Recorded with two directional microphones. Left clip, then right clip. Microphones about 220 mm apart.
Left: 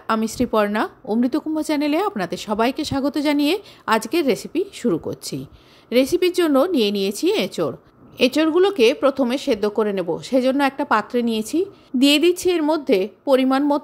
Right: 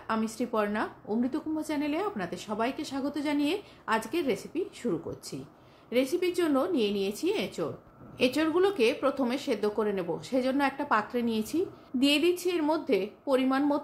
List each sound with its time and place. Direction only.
0.0 s a woman's voice: 40° left (ahead or behind)